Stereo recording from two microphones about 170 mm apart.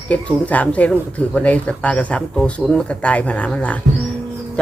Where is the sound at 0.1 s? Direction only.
10° left (ahead or behind).